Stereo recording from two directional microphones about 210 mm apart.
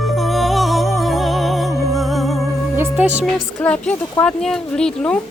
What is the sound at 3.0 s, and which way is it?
Speech, 30° right (ahead or behind).